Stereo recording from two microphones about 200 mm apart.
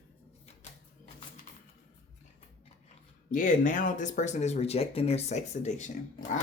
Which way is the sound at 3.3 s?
40° left (ahead or behind).